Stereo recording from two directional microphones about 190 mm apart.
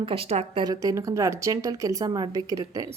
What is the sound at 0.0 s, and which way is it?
Speech, 30° right (ahead or behind).